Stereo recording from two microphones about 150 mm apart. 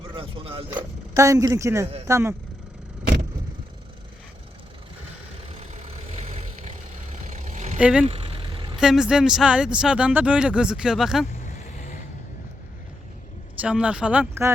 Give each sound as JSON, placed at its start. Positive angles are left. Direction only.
{"t": 0.1, "sound": "vehicle", "side_deg": -35}
{"t": 1.1, "sound": "a man's voice", "side_deg": -20}
{"t": 5.5, "sound": "vehicle", "side_deg": -45}
{"t": 7.8, "sound": "speech", "side_deg": -5}
{"t": 8.0, "sound": "vehicle", "side_deg": -40}
{"t": 8.8, "sound": "speech", "side_deg": -5}
{"t": 11.3, "sound": "vehicle", "side_deg": 55}
{"t": 13.6, "sound": "speech", "side_deg": -5}